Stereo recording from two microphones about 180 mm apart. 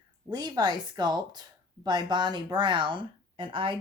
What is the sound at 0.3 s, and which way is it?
Speech, 25° right (ahead or behind).